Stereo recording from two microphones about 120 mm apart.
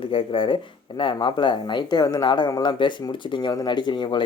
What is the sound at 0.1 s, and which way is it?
Speech, 45° left (ahead or behind).